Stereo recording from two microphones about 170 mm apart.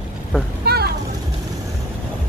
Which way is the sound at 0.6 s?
70° right (ahead or behind).